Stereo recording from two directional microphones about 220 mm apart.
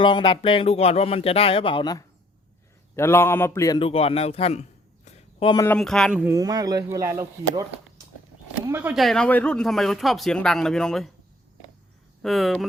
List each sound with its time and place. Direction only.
0.0 s speech: 20° left (ahead or behind)
5.0 s a sound: 25° left (ahead or behind)
5.6 s speech: 5° left (ahead or behind)
12.2 s speech: centre (ahead or behind)